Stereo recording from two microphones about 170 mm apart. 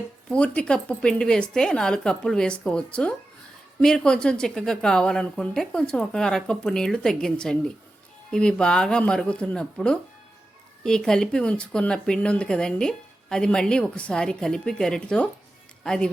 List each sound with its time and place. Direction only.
0.3 s speech: 5° left (ahead or behind)